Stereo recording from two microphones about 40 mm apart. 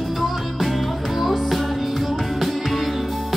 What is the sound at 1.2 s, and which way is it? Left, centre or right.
Music, centre.